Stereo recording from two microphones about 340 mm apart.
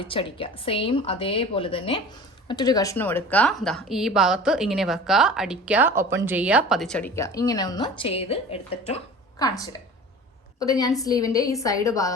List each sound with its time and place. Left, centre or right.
0.0 s a woman's voice: centre